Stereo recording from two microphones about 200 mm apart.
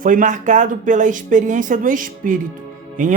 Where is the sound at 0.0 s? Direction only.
40° right (ahead or behind).